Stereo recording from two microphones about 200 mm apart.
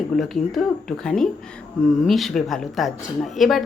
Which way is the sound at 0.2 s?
Centre (ahead or behind).